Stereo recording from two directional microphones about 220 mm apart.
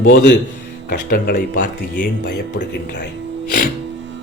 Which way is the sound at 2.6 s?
50° left (ahead or behind).